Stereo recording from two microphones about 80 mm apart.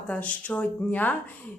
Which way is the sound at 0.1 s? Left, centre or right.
Centre.